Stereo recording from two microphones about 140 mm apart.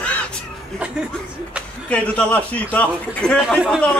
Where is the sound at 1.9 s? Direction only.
10° left (ahead or behind).